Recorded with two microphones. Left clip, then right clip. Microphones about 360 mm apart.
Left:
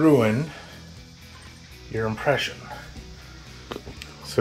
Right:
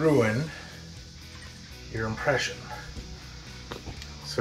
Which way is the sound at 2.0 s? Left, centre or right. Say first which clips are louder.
Left 4 dB; left.